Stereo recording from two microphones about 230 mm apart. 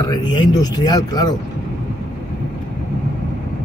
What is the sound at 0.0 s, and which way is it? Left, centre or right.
Speech, centre.